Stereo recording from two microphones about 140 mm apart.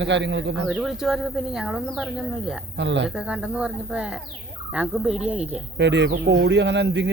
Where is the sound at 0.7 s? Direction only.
5° right (ahead or behind).